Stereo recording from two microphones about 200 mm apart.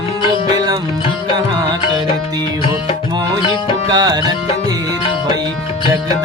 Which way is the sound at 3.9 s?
20° right (ahead or behind).